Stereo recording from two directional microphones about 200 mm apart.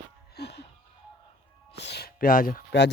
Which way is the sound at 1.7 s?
55° left (ahead or behind).